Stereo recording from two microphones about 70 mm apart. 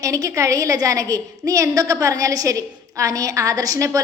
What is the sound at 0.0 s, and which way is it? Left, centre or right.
A woman's voice, right.